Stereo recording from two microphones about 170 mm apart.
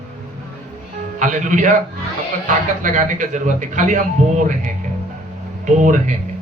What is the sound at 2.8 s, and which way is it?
Speech, 45° right (ahead or behind).